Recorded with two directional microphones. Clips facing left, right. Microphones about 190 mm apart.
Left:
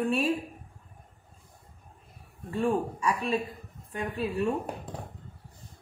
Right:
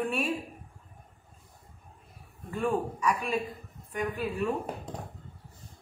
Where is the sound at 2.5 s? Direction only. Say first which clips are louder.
Left 2 dB; 30° left (ahead or behind).